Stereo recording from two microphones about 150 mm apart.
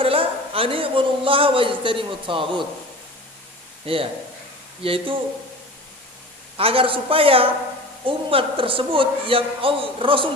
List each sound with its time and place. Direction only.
0.0 s a man's voice: 40° right (ahead or behind)
3.8 s speech: 40° right (ahead or behind)
6.6 s speech: 40° right (ahead or behind)